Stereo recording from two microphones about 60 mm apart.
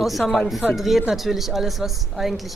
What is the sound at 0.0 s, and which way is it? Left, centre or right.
Speech, centre.